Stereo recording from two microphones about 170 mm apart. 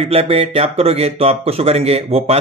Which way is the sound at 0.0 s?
35° right (ahead or behind).